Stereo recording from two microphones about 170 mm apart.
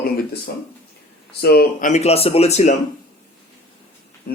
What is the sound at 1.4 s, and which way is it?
A man's voice, 65° left (ahead or behind).